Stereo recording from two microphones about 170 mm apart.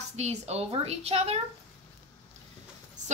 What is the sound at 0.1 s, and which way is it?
Speech, 40° right (ahead or behind).